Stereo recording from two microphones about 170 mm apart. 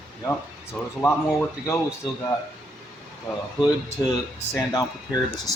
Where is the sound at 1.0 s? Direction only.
15° left (ahead or behind).